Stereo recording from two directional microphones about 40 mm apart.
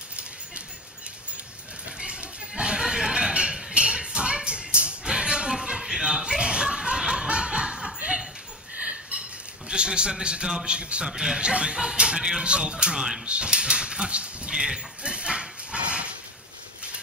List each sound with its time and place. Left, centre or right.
2.0 s a sound: right
5.1 s chuckle: centre
8.7 s a sound: right
9.7 s a man's voice: right
11.1 s speech: centre
12.7 s speech: centre
13.2 s speech: right
14.5 s dog: centre